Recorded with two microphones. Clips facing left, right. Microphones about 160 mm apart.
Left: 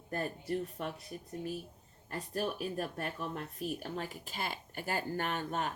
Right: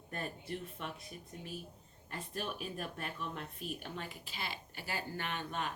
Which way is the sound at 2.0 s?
40° left (ahead or behind).